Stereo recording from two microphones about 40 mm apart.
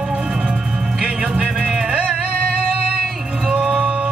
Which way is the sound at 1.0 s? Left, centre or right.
Right.